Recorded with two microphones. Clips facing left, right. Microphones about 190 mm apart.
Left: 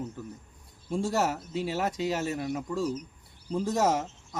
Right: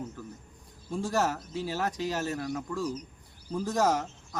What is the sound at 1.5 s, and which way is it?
Speech, 25° left (ahead or behind).